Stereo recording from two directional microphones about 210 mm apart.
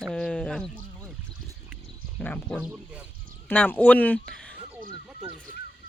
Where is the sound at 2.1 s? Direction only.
5° left (ahead or behind).